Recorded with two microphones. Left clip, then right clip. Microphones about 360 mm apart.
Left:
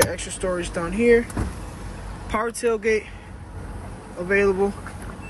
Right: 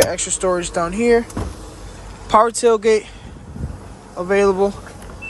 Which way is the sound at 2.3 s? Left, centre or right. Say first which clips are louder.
Right 10 dB; centre.